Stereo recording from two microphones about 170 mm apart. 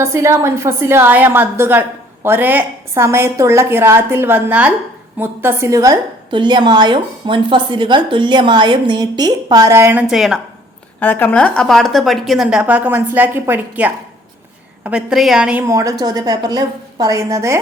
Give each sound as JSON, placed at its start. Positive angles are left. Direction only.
{"t": 0.0, "sound": "a woman's voice", "side_deg": -15}
{"t": 11.0, "sound": "a woman's voice", "side_deg": 10}
{"t": 15.6, "sound": "a woman's voice", "side_deg": -20}